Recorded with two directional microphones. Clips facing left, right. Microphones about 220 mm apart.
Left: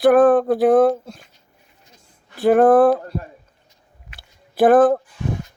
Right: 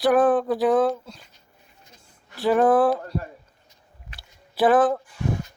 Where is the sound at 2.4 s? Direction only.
55° left (ahead or behind).